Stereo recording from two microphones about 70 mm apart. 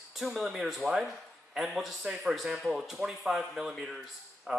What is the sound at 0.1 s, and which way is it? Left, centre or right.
Speech, centre.